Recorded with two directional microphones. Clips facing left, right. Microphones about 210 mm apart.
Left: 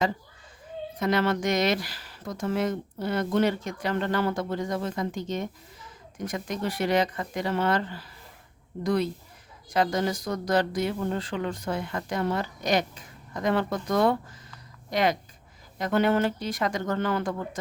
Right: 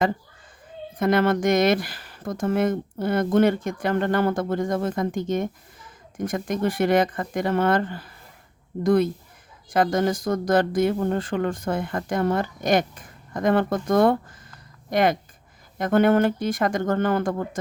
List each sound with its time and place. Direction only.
0.9 s speech: 50° right (ahead or behind)